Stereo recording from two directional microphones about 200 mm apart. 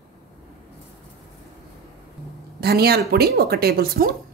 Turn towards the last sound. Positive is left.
turn(degrees=-50)  # may be behind; listen again after turning